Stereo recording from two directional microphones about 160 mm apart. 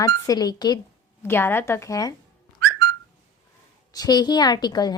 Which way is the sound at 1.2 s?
15° left (ahead or behind).